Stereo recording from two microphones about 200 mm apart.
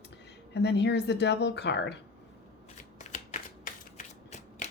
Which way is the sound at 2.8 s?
35° left (ahead or behind).